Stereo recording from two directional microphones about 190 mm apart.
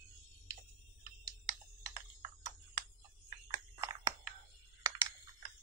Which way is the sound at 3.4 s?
20° right (ahead or behind).